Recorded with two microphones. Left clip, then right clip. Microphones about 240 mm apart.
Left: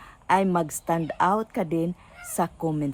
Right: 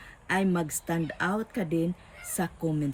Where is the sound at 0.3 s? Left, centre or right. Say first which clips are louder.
Left 6 dB; centre.